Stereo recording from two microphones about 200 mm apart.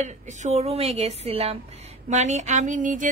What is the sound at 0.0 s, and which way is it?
A woman's voice, 35° right (ahead or behind).